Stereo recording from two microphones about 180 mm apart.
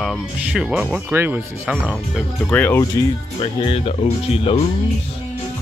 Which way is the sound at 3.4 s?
30° left (ahead or behind).